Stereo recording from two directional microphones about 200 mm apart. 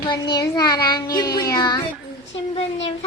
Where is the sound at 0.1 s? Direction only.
20° left (ahead or behind).